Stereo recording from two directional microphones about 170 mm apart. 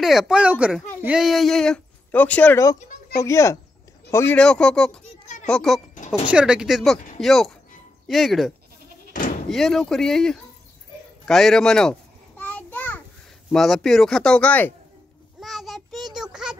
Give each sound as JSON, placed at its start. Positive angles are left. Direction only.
{"t": 0.0, "sound": "speech", "side_deg": 0}
{"t": 9.1, "sound": "slam", "side_deg": 50}
{"t": 9.5, "sound": "speech", "side_deg": 0}
{"t": 11.2, "sound": "a sound", "side_deg": 0}
{"t": 13.5, "sound": "speech", "side_deg": 0}
{"t": 15.4, "sound": "child singing", "side_deg": 0}
{"t": 16.2, "sound": "a sound", "side_deg": -5}